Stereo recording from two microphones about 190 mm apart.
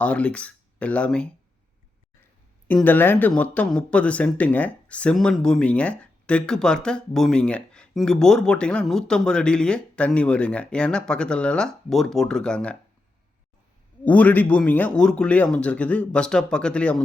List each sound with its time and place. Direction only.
0.0 s speech: 5° left (ahead or behind)
2.6 s speech: 10° left (ahead or behind)
14.0 s speech: 5° left (ahead or behind)